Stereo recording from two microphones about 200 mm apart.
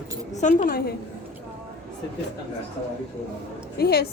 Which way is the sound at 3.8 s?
50° left (ahead or behind).